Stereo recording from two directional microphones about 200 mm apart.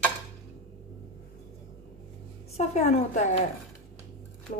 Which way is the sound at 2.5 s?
35° left (ahead or behind).